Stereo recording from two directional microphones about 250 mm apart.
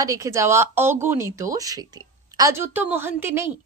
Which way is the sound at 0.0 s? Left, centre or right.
Centre.